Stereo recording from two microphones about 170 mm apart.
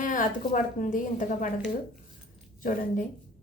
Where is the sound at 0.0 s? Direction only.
50° left (ahead or behind).